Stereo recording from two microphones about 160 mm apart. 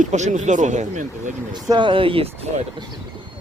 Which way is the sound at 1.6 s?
30° right (ahead or behind).